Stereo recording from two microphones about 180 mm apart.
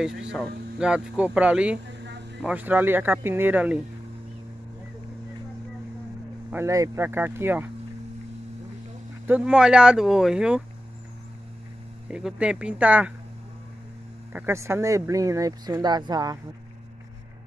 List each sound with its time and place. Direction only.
0.7 s speech: 5° right (ahead or behind)
1.9 s a sound: 75° right (ahead or behind)
2.4 s speech: 10° right (ahead or behind)
6.5 s speech: 15° right (ahead or behind)
9.3 s speech: 5° right (ahead or behind)
12.1 s speech: 5° right (ahead or behind)
14.3 s speech: 15° right (ahead or behind)